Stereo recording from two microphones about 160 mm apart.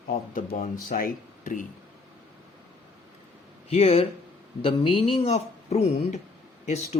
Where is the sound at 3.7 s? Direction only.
40° left (ahead or behind).